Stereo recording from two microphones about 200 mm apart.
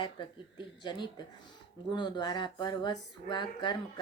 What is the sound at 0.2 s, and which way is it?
Speech, 25° left (ahead or behind).